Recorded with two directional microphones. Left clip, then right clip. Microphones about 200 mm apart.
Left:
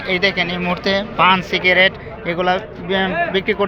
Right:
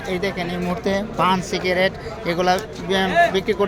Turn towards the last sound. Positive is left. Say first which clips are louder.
# right 1 dB
turn(degrees=-15)  # may be behind; listen again after turning